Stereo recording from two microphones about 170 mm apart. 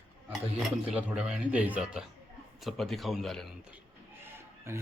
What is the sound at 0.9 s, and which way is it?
A man's voice, 5° right (ahead or behind).